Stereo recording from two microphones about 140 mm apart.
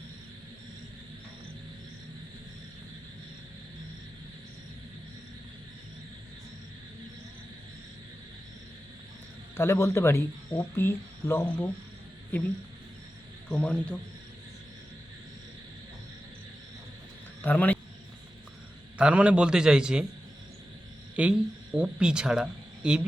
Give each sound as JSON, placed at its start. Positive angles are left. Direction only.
{"t": 9.6, "sound": "speech", "side_deg": 20}
{"t": 13.5, "sound": "speech", "side_deg": 10}
{"t": 17.4, "sound": "a man's voice", "side_deg": 10}
{"t": 18.9, "sound": "a man's voice", "side_deg": -10}
{"t": 21.2, "sound": "speech", "side_deg": -5}